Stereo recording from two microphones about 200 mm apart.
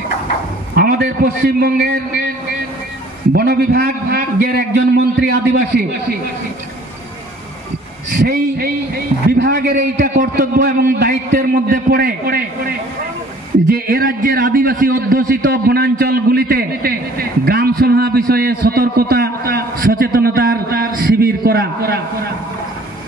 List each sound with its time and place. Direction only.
0.7 s a man's voice: 50° right (ahead or behind)
3.3 s a man's voice: 50° right (ahead or behind)
8.1 s a man's voice: 50° right (ahead or behind)